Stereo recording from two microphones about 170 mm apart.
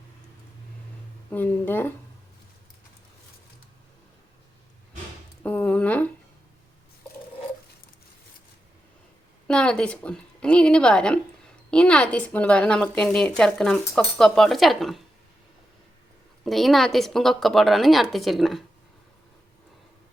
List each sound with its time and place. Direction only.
1.3 s speech: 10° left (ahead or behind)
5.4 s a sound: 10° left (ahead or behind)
9.5 s a woman's voice: 5° left (ahead or behind)
16.4 s a woman's voice: centre (ahead or behind)